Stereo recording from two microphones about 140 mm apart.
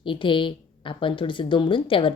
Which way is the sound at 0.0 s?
35° left (ahead or behind).